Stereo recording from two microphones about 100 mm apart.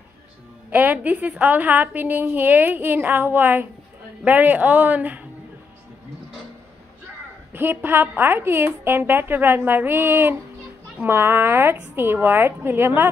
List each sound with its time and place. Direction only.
0.7 s a woman's voice: 15° right (ahead or behind)
7.5 s a woman's voice: 20° right (ahead or behind)